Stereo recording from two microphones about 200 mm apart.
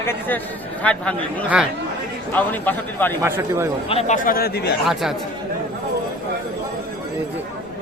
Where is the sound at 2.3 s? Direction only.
10° left (ahead or behind).